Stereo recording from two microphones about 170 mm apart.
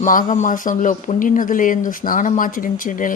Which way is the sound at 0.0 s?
50° left (ahead or behind).